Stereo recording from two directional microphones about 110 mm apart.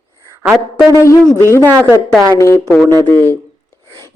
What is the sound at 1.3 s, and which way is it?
Mantra, 25° left (ahead or behind).